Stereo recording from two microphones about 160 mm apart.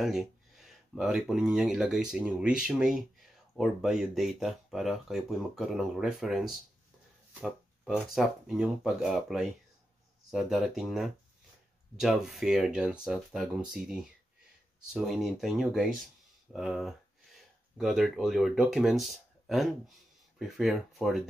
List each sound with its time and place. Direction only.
0.0 s speech: centre (ahead or behind)